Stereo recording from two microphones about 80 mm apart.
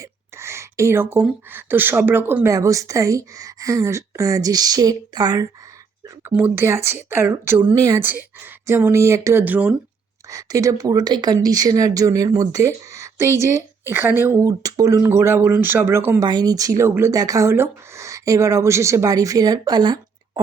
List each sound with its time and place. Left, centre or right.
0.0 s a sound: right
1.5 s speech: right
2.5 s a woman's voice: right
6.2 s speech: right
7.8 s speech: right
8.0 s speech: right
9.4 s speech: centre
10.2 s a woman's voice: right
14.4 s speech: right
16.2 s a woman's voice: right
16.8 s speech: right
17.2 s a woman's voice: right
17.5 s speech: right